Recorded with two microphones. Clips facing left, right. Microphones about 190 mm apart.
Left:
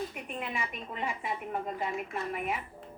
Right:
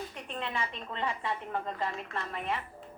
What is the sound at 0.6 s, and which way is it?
Speech, 30° right (ahead or behind).